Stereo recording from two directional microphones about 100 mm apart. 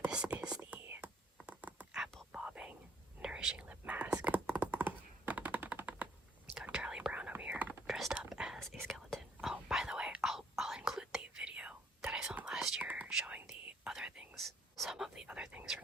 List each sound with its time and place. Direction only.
0.0 s whispering: 10° right (ahead or behind)
0.9 s whispering: 25° right (ahead or behind)
1.4 s patter: 15° right (ahead or behind)
2.0 s whispering: 5° left (ahead or behind)
2.3 s whispering: 10° right (ahead or behind)
8.1 s whispering: 5° right (ahead or behind)
8.5 s whispering: 5° left (ahead or behind)